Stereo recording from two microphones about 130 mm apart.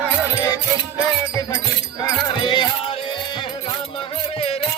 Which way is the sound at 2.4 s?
40° left (ahead or behind).